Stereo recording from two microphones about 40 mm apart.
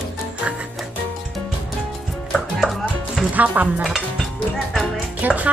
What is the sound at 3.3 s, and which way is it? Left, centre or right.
Speech, right.